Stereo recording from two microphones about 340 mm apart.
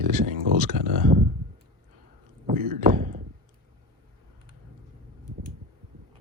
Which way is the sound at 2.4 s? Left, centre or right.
Right.